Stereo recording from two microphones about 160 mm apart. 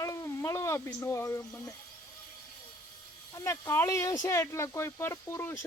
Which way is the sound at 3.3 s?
20° left (ahead or behind).